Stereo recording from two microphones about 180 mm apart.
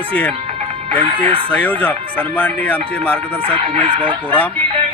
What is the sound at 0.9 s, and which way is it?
Speech, 30° right (ahead or behind).